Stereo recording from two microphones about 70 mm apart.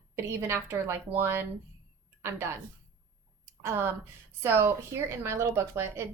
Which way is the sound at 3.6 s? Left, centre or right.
Right.